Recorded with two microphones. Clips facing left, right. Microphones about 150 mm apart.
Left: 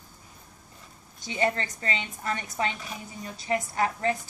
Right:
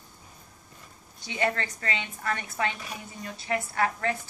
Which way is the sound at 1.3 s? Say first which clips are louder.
Left 1 dB; 20° left (ahead or behind).